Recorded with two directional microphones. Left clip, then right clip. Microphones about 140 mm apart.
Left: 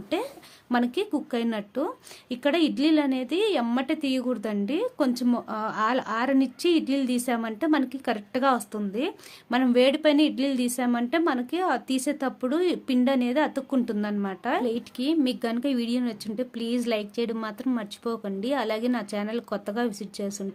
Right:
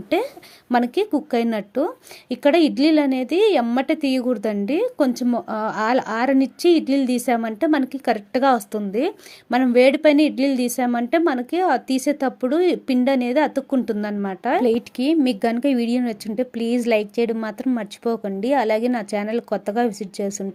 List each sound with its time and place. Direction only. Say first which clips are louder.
0.1 s a woman's voice: right 8 dB; 40° right (ahead or behind)
14.6 s a woman's voice: right 9 dB; 40° right (ahead or behind)